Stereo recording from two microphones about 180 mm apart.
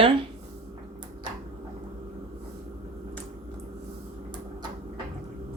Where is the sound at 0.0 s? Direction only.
30° right (ahead or behind).